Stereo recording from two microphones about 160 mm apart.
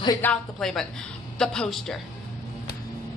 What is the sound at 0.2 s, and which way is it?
A woman's voice, 5° left (ahead or behind).